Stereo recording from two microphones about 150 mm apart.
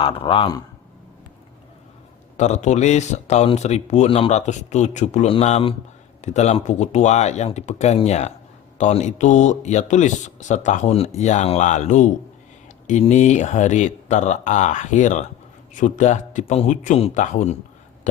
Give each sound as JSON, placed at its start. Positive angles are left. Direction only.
{"t": 0.0, "sound": "a man's voice", "side_deg": 35}
{"t": 2.4, "sound": "speech", "side_deg": 50}